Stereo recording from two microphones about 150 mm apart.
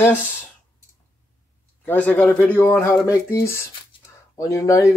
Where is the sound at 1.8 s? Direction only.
10° left (ahead or behind).